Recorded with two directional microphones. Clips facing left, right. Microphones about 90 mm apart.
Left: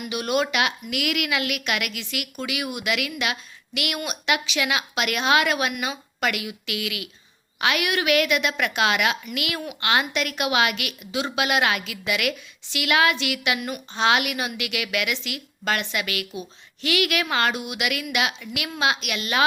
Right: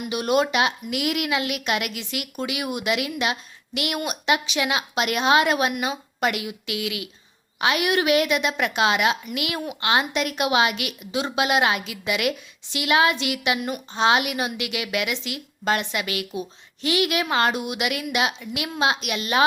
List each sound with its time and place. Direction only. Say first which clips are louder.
0.0 s a woman's voice: right 3 dB; 35° right (ahead or behind)